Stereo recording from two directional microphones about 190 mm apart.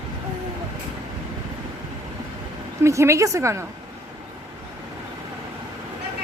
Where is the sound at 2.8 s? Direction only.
15° right (ahead or behind).